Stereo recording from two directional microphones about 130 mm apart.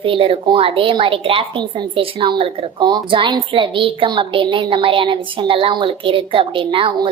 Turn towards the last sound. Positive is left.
turn(degrees=-40)  # may be behind; listen again after turning